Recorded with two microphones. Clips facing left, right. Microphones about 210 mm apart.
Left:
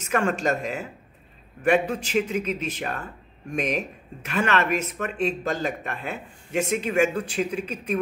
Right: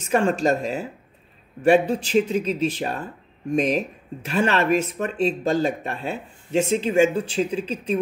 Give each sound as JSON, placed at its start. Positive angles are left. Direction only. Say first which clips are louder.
{"t": 0.0, "sound": "speech", "louder": "right 4 dB", "side_deg": -30}